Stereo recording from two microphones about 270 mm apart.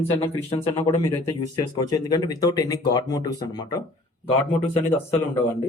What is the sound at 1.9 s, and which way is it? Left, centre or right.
Speech, centre.